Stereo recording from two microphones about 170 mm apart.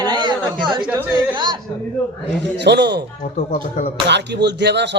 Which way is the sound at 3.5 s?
50° left (ahead or behind).